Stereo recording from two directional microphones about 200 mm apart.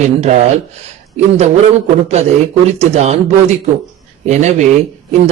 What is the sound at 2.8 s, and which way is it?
Speech, 30° right (ahead or behind).